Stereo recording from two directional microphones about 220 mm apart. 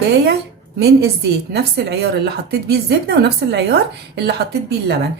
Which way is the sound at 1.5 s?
50° right (ahead or behind).